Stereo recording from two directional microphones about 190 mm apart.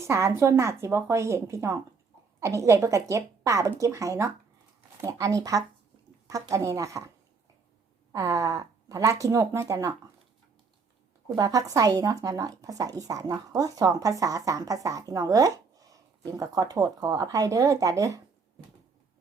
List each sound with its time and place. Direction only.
0.0 s speech: 15° right (ahead or behind)
8.1 s speech: 15° right (ahead or behind)
11.3 s speech: 20° right (ahead or behind)